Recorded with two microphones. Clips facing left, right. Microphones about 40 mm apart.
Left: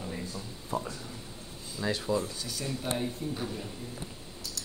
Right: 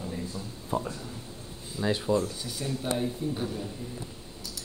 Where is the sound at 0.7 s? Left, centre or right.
Right.